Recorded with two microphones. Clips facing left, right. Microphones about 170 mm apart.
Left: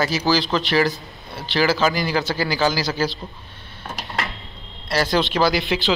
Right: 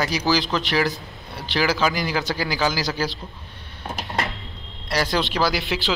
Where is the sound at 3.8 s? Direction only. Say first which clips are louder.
Right 1 dB; 20° right (ahead or behind).